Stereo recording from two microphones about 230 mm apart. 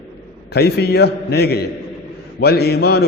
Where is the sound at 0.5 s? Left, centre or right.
Left.